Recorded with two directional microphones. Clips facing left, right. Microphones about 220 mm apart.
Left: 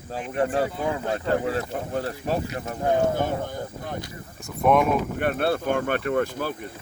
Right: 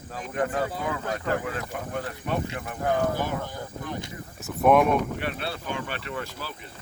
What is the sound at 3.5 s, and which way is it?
Speech, 50° left (ahead or behind).